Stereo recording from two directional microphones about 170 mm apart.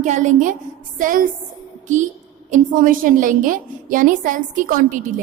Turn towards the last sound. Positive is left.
turn(degrees=-50)  # may be behind; listen again after turning